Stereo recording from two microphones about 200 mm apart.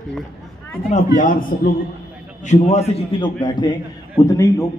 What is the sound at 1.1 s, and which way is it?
Speech, 45° left (ahead or behind).